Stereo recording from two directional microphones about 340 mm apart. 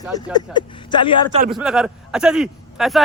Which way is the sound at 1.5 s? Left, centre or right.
Centre.